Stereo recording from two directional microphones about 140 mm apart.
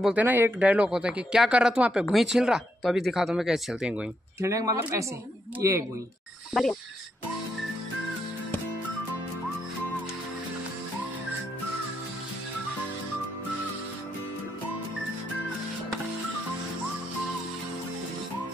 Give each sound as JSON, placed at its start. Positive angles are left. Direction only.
{"t": 0.0, "sound": "speech", "side_deg": -10}
{"t": 4.4, "sound": "speech", "side_deg": -25}